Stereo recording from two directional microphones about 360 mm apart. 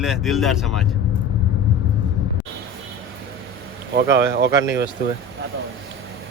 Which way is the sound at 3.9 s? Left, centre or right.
Right.